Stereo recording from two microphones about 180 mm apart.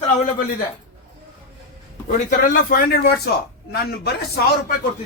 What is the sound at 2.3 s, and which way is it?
Speech, 50° left (ahead or behind).